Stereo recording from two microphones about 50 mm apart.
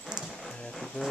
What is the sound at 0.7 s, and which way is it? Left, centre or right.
Music, centre.